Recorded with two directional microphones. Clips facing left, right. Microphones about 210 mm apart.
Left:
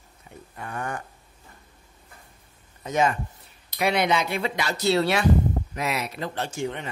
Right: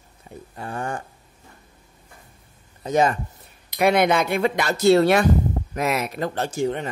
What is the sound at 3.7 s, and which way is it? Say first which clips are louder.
Speech: right 5 dB; 50° right (ahead or behind).